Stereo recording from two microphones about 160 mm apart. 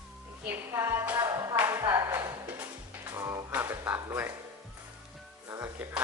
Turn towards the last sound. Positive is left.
turn(degrees=-15)  # may be behind; listen again after turning